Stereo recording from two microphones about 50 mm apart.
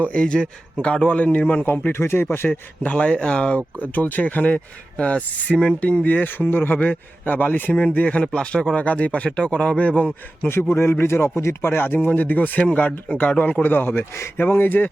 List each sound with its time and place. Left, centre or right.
0.0 s speech: left
1.9 s speech: left
2.8 s speech: left
3.8 s speech: left
6.2 s speech: left
10.5 s speech: left
12.0 s speech: left
14.3 s speech: left